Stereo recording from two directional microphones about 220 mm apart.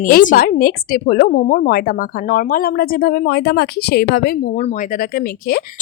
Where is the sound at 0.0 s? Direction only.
35° left (ahead or behind).